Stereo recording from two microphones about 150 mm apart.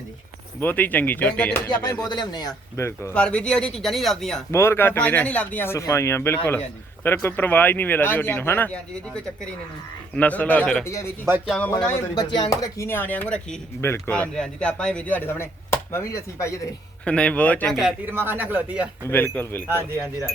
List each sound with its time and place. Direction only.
0.6 s speech: 10° left (ahead or behind)
1.7 s speech: 25° left (ahead or behind); by 4.4 s 5° left (ahead or behind)
4.5 s speech: 15° left (ahead or behind)
10.2 s speech: 10° left (ahead or behind)
10.8 s speech: 20° left (ahead or behind)
11.4 s speech: 5° left (ahead or behind)
12.1 s speech: 30° left (ahead or behind)
17.1 s speech: 10° left (ahead or behind)
17.7 s speech: 5° right (ahead or behind)
18.1 s speech: 15° right (ahead or behind)
19.0 s speech: 15° left (ahead or behind)